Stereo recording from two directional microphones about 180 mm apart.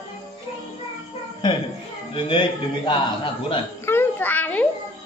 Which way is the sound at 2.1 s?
30° left (ahead or behind).